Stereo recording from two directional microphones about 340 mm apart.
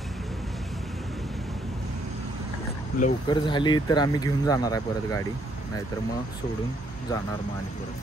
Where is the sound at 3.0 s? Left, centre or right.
Centre.